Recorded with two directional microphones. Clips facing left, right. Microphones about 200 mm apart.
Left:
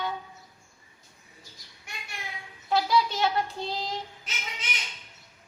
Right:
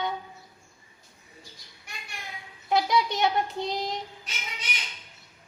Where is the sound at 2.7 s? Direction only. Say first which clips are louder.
Even; 20° right (ahead or behind).